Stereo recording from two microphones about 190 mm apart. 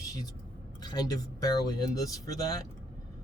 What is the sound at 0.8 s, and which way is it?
Speech, 20° left (ahead or behind).